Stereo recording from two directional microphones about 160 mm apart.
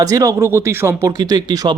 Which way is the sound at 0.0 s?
20° right (ahead or behind).